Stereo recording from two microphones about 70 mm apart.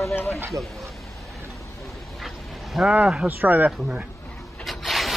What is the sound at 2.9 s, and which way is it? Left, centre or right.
Speech, centre.